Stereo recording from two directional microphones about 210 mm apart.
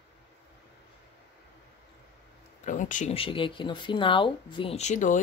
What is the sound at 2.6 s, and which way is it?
Speech, 35° left (ahead or behind).